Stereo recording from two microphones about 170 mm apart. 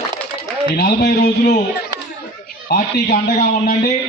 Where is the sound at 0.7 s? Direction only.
65° left (ahead or behind).